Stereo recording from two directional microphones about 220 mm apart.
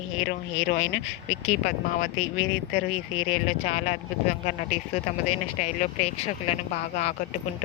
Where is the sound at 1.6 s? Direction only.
35° left (ahead or behind).